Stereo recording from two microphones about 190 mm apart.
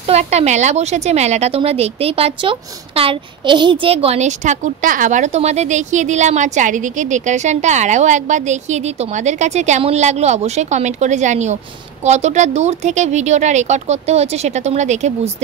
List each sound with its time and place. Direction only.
0.0 s speech: 35° right (ahead or behind)